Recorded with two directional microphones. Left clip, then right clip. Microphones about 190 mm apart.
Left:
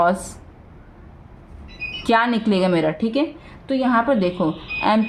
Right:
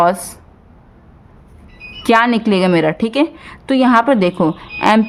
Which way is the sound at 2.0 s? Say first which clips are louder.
Right 6 dB; 35° right (ahead or behind).